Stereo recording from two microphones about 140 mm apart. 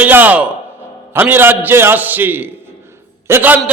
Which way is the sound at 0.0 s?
10° right (ahead or behind).